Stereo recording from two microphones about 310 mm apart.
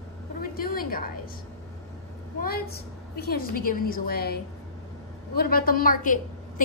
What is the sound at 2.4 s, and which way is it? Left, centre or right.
A woman's voice, left.